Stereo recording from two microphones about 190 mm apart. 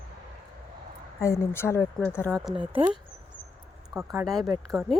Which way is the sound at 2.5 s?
25° right (ahead or behind).